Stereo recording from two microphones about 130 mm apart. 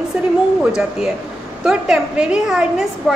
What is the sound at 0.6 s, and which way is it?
A woman's voice, 5° right (ahead or behind).